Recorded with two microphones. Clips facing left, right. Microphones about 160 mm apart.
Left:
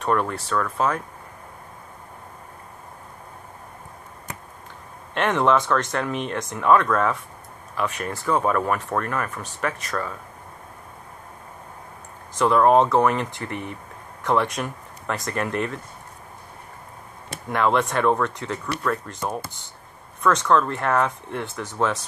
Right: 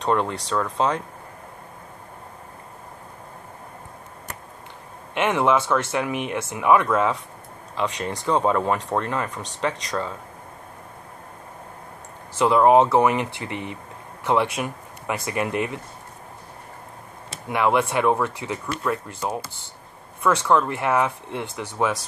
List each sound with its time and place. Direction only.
0.0 s speech: 20° right (ahead or behind)
5.1 s speech: 10° right (ahead or behind)
12.4 s speech: 15° right (ahead or behind)
17.5 s speech: 10° right (ahead or behind)
20.4 s speech: 15° right (ahead or behind)